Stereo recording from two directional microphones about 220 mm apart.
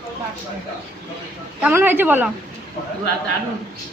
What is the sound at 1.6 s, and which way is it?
Speech, 10° right (ahead or behind).